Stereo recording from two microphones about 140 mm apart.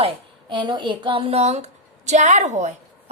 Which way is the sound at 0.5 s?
35° right (ahead or behind).